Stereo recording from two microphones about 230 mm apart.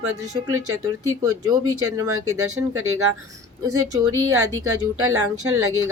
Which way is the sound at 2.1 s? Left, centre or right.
Right.